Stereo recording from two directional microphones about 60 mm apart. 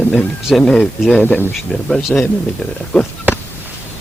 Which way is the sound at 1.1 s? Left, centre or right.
Centre.